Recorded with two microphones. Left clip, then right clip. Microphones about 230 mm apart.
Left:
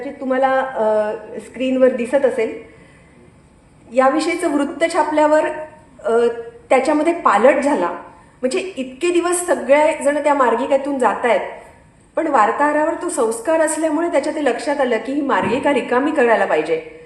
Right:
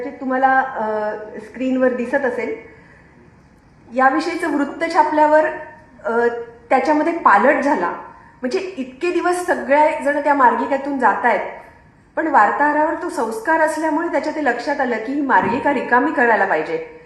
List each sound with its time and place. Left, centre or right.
0.0 s a woman's voice: left
3.9 s a woman's voice: left
9.0 s a woman's voice: left